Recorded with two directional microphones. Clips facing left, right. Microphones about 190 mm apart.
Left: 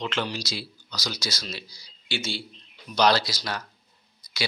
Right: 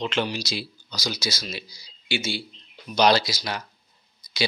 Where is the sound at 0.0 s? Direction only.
20° right (ahead or behind).